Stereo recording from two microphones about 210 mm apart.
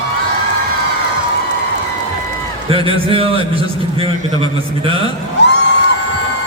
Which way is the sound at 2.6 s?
25° right (ahead or behind).